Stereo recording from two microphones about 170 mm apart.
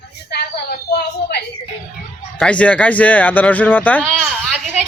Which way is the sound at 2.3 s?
5° left (ahead or behind).